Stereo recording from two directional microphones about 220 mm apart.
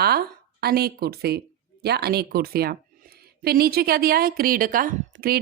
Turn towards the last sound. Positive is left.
turn(degrees=-40)  # may be behind; listen again after turning